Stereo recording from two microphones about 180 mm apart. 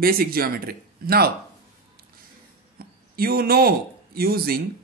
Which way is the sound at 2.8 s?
55° right (ahead or behind).